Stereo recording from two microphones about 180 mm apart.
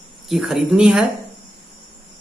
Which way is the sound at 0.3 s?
Centre (ahead or behind).